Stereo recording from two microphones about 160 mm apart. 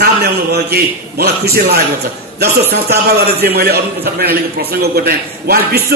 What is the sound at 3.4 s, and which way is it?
A man's voice, 75° right (ahead or behind).